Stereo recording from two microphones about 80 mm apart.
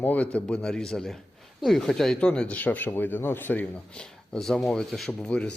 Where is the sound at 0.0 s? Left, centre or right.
Centre.